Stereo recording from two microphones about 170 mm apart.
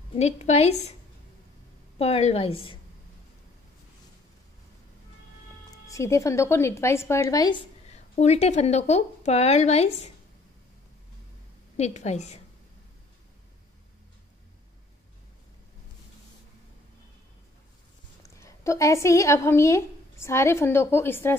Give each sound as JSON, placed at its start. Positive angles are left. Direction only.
{"t": 0.1, "sound": "speech", "side_deg": 40}
{"t": 2.0, "sound": "speech", "side_deg": 35}
{"t": 5.9, "sound": "a woman's voice", "side_deg": 20}
{"t": 7.9, "sound": "speech", "side_deg": 40}
{"t": 11.7, "sound": "speech", "side_deg": 40}
{"t": 18.4, "sound": "a woman's voice", "side_deg": 15}